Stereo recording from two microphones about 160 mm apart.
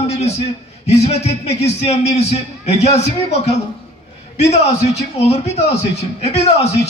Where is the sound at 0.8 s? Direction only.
40° left (ahead or behind).